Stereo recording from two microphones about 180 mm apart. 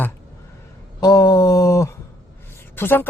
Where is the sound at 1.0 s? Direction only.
20° left (ahead or behind).